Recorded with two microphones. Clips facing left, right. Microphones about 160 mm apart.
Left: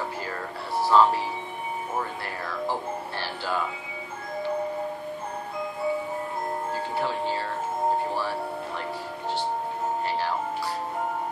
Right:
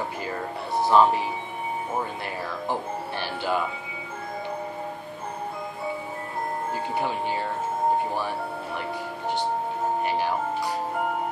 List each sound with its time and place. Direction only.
0.7 s speech: 20° right (ahead or behind)
2.7 s music: 20° right (ahead or behind)
7.0 s speech: 15° right (ahead or behind)
10.0 s speech: 15° right (ahead or behind)